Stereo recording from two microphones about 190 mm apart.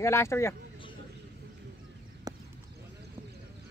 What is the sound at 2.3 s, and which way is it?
Clip-clop, 20° right (ahead or behind).